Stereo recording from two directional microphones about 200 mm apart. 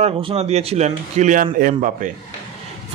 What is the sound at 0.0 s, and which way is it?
Speech, 30° right (ahead or behind).